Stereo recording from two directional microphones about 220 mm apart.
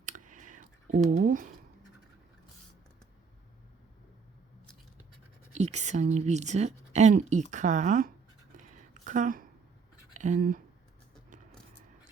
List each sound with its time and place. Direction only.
0.0 s clicking: 35° right (ahead or behind)
5.5 s speech: 30° right (ahead or behind)
8.5 s a sound: 35° right (ahead or behind)
10.2 s speech: 35° right (ahead or behind)